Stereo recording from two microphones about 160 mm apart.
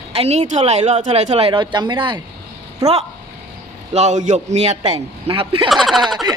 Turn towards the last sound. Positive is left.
turn(degrees=0)  # may be behind; listen again after turning